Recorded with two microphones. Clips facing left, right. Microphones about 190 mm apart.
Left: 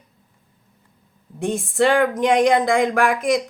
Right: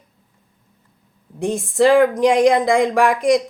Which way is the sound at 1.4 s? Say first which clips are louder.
Right 3 dB; centre (ahead or behind).